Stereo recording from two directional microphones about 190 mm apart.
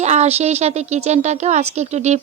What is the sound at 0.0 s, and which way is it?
Speech, 35° right (ahead or behind).